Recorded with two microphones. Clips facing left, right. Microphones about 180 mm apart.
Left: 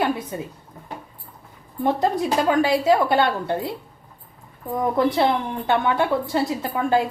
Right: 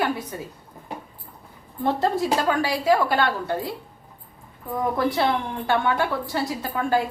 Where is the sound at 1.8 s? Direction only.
15° left (ahead or behind).